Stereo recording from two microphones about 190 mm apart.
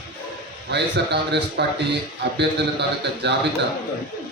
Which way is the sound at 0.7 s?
65° right (ahead or behind).